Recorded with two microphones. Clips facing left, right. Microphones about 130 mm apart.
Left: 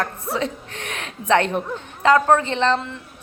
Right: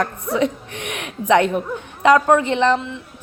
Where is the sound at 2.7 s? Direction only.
Centre (ahead or behind).